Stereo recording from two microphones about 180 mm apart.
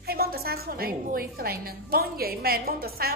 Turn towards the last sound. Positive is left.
turn(degrees=-55)  # may be behind; listen again after turning